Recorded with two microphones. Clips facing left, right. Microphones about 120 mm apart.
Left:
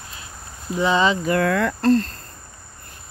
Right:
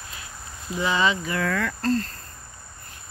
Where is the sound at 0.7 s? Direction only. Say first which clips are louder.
Left 4 dB; 25° left (ahead or behind).